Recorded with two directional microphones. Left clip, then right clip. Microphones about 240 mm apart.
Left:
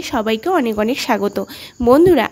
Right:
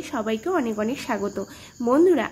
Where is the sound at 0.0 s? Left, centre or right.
Left.